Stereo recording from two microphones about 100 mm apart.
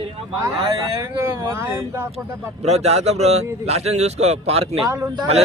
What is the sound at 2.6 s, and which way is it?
Speech, 90° right.